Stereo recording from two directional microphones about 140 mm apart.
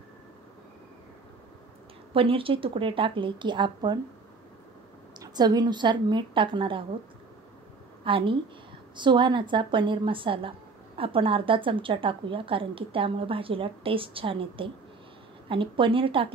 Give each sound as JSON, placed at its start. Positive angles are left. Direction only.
{"t": 2.1, "sound": "a woman's voice", "side_deg": -40}
{"t": 5.2, "sound": "a woman's voice", "side_deg": -30}
{"t": 8.0, "sound": "a woman's voice", "side_deg": -40}